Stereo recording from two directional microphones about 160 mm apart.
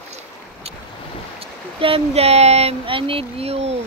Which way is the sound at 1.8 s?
35° right (ahead or behind).